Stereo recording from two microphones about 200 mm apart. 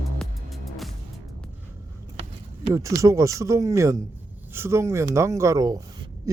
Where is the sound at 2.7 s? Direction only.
15° right (ahead or behind).